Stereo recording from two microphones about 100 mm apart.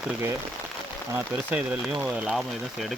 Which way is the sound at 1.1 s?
15° right (ahead or behind).